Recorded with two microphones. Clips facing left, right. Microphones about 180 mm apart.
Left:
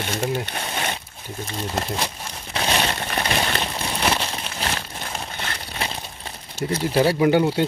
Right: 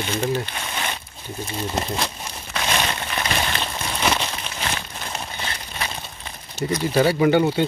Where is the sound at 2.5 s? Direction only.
35° left (ahead or behind).